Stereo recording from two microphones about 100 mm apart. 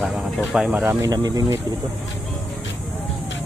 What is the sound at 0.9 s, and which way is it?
Speech, 35° right (ahead or behind).